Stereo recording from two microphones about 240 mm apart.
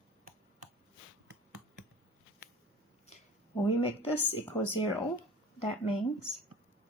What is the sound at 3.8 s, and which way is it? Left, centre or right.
A woman's voice, left.